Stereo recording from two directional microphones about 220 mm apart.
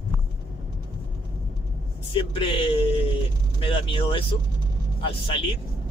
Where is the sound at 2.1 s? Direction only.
25° left (ahead or behind).